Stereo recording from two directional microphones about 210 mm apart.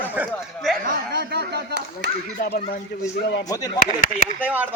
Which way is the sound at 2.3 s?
40° left (ahead or behind).